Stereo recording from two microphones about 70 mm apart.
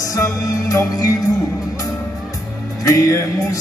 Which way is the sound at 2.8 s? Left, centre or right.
Left.